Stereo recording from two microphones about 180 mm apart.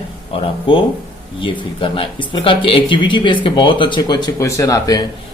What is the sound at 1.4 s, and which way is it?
Speech, 30° left (ahead or behind).